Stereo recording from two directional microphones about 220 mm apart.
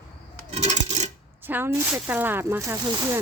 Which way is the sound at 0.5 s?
30° right (ahead or behind).